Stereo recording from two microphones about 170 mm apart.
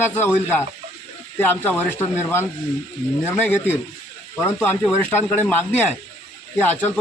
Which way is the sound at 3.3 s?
10° left (ahead or behind).